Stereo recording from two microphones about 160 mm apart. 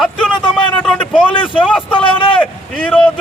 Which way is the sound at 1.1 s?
30° left (ahead or behind).